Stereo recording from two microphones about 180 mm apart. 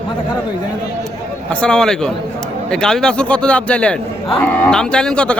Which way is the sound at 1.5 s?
5° left (ahead or behind).